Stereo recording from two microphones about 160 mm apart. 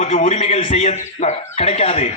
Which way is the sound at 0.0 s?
45° left (ahead or behind).